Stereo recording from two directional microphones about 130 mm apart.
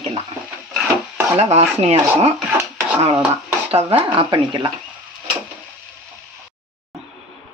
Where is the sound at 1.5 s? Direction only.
55° right (ahead or behind).